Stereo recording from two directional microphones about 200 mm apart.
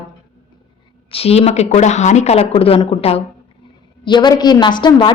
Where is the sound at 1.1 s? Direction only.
30° left (ahead or behind).